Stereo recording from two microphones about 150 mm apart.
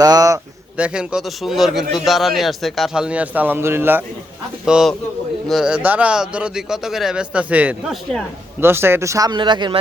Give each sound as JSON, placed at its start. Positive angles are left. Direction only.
{"t": 0.0, "sound": "speech", "side_deg": -25}
{"t": 0.8, "sound": "a man's voice", "side_deg": -5}
{"t": 4.6, "sound": "a man's voice", "side_deg": -5}